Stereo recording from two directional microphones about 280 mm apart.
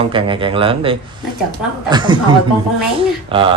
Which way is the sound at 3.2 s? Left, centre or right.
Centre.